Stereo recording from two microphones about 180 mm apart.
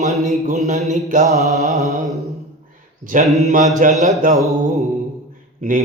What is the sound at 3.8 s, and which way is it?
Mantra, 45° right (ahead or behind).